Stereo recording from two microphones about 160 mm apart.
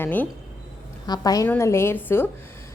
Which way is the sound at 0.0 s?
10° left (ahead or behind).